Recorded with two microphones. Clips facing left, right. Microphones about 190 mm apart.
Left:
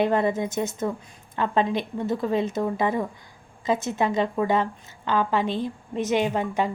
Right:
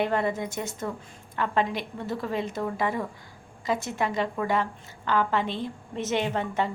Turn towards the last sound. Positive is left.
turn(degrees=15)  # may be behind; listen again after turning